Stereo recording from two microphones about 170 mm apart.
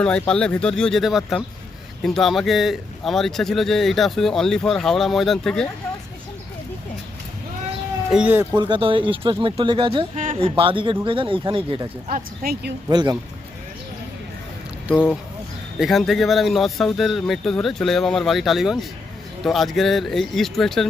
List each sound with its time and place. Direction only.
0.0 s speech: 5° left (ahead or behind)
8.1 s speech: 10° right (ahead or behind)
8.5 s speech: 25° right (ahead or behind)
12.1 s speech: 60° right (ahead or behind)
12.9 s speech: 25° right (ahead or behind)
14.8 s speech: 5° right (ahead or behind)